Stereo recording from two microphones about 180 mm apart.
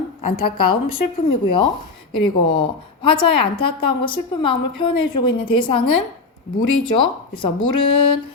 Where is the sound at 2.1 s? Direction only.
25° left (ahead or behind).